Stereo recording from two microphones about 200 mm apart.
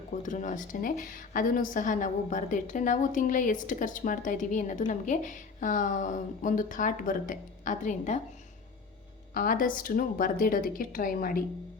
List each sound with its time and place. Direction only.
0.1 s a woman's voice: 40° left (ahead or behind)
9.3 s a woman's voice: 45° left (ahead or behind)